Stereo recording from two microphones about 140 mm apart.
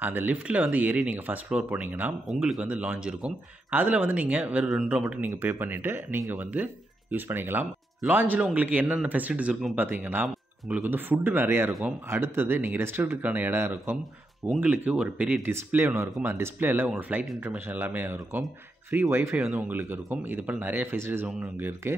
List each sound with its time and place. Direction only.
0.0 s speech: 15° right (ahead or behind)
15.5 s speech: 15° right (ahead or behind)